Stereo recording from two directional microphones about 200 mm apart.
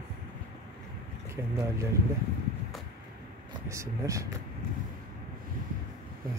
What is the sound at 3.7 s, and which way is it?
Speech, 15° right (ahead or behind).